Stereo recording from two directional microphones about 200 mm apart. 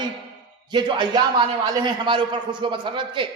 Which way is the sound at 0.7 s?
25° right (ahead or behind).